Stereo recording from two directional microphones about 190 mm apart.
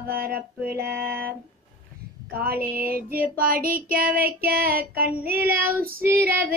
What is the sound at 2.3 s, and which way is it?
Child singing, 50° right (ahead or behind).